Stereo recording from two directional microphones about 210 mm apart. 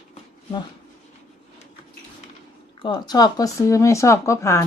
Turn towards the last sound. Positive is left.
turn(degrees=15)  # may be behind; listen again after turning